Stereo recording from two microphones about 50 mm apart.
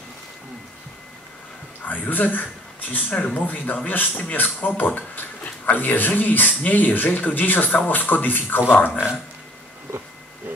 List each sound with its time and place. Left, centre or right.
1.9 s speech: left